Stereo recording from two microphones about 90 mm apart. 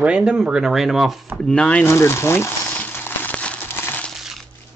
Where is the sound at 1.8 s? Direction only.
30° left (ahead or behind).